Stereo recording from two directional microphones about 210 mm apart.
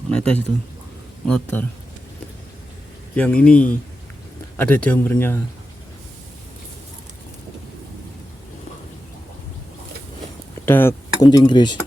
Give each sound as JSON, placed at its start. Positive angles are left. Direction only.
{"t": 0.1, "sound": "speech", "side_deg": 5}
{"t": 3.2, "sound": "speech", "side_deg": 5}
{"t": 10.7, "sound": "speech", "side_deg": 10}